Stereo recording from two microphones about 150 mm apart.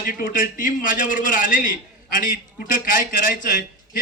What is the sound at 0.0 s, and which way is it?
A man's voice, 70° left (ahead or behind).